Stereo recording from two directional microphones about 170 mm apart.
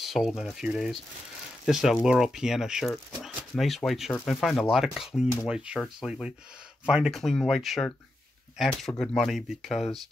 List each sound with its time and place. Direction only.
0.0 s speech: centre (ahead or behind)